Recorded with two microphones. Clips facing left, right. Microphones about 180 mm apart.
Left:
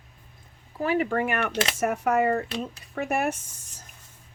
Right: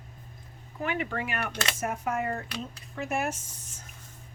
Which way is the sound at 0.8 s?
40° left (ahead or behind).